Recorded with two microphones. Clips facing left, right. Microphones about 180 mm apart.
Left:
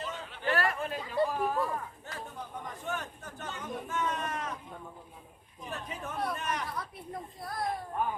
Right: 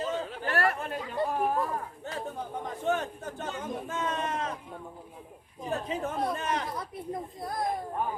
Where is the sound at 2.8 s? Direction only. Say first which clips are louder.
Right 10 dB; 30° right (ahead or behind).